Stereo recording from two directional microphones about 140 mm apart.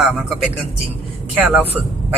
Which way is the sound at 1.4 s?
10° right (ahead or behind).